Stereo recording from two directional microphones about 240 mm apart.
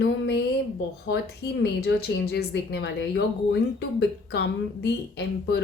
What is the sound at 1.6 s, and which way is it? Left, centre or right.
A woman's voice, left.